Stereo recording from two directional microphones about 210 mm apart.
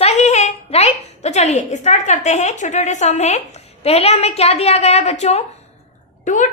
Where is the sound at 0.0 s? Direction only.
30° left (ahead or behind).